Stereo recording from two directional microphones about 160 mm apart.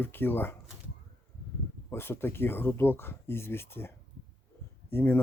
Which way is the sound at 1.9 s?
15° left (ahead or behind).